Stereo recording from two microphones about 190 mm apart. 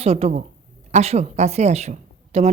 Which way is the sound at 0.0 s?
35° right (ahead or behind).